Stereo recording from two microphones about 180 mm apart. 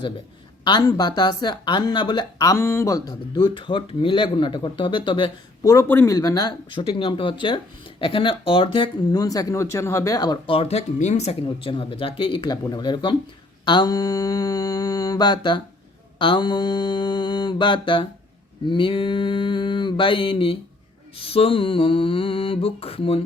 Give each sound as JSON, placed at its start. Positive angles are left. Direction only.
{"t": 0.6, "sound": "speech", "side_deg": 25}
{"t": 21.2, "sound": "mantra", "side_deg": 30}